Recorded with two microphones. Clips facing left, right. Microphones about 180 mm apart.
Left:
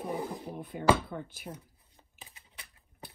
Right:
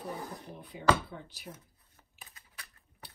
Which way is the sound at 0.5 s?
50° left (ahead or behind).